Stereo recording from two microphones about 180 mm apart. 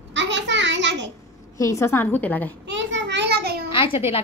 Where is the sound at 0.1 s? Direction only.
80° right.